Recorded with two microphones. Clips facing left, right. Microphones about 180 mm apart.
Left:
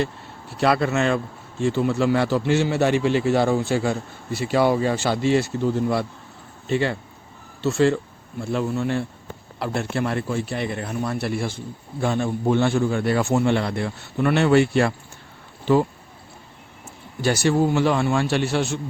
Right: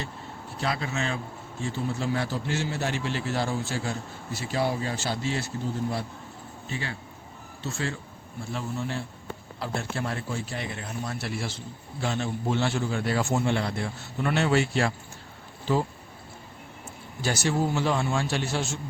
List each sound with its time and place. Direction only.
0.5 s a man's voice: 70° left (ahead or behind)
17.2 s a man's voice: 60° left (ahead or behind)